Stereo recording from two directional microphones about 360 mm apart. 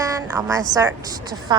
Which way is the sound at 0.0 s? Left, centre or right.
Centre.